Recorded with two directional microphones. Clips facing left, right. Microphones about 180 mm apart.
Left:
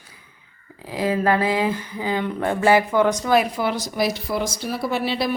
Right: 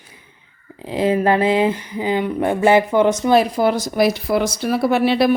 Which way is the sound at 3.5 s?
45° right (ahead or behind).